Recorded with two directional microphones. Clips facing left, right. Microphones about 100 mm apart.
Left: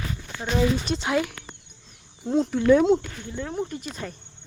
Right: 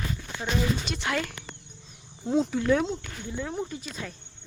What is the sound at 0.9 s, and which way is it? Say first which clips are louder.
Speech: left 5 dB; 20° left (ahead or behind).